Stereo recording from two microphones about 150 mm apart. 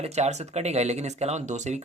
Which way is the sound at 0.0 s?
45° right (ahead or behind).